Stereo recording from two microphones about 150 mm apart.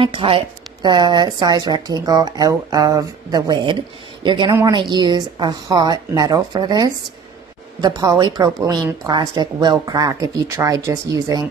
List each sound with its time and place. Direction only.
0.0 s a woman's voice: 35° right (ahead or behind)